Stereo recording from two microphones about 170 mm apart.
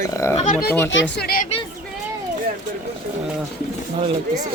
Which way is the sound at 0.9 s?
90° left.